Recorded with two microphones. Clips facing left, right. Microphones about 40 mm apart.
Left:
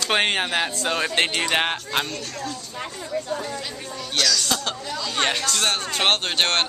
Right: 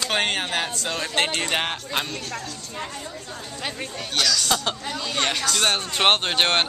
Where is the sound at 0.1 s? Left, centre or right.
Centre.